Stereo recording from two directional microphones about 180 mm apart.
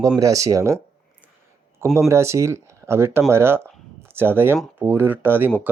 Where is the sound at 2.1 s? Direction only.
15° right (ahead or behind).